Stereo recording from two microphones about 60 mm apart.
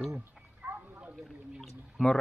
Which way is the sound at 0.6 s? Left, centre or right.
Right.